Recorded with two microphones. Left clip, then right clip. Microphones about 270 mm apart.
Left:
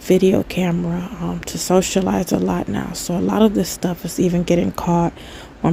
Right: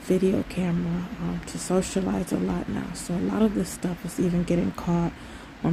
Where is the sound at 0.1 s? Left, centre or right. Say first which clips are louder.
Left 9 dB; left.